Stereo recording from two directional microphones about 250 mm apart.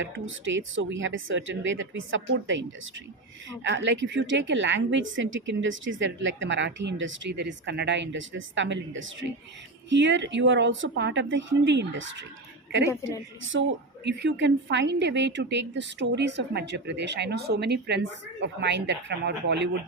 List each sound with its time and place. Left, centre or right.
0.0 s a woman's voice: right
12.9 s a woman's voice: centre
13.4 s a woman's voice: right